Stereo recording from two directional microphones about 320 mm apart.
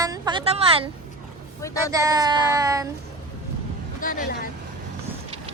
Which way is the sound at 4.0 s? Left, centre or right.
Left.